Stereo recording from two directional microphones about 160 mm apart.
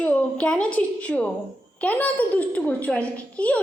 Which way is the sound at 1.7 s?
10° left (ahead or behind).